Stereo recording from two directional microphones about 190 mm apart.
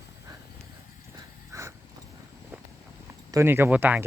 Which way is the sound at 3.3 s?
15° right (ahead or behind).